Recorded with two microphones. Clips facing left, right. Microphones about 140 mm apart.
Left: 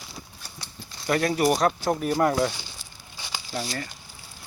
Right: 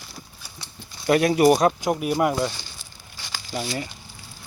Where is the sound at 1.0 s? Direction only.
20° right (ahead or behind).